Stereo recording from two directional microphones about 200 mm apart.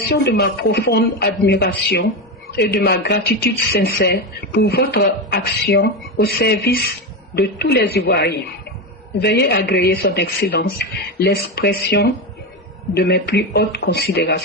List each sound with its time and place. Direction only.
0.0 s speech: 55° left (ahead or behind)